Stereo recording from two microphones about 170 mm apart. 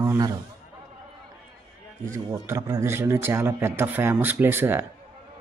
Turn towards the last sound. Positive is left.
turn(degrees=-15)  # may be behind; listen again after turning